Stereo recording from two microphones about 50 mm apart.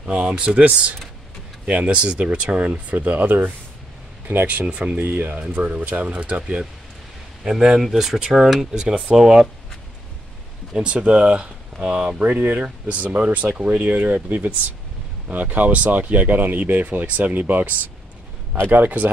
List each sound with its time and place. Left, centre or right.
0.0 s speech: right
4.6 s speech: right
7.4 s speech: centre
8.8 s speech: centre
10.8 s speech: right
12.2 s speech: right